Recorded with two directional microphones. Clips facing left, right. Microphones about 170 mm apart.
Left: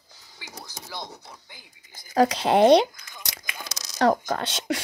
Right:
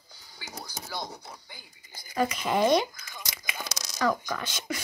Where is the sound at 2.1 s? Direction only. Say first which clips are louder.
Left 7 dB; 85° left.